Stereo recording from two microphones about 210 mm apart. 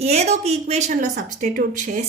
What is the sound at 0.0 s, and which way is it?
Speech, 30° right (ahead or behind).